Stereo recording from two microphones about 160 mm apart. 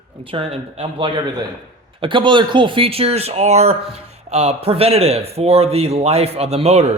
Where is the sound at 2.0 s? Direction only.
30° right (ahead or behind).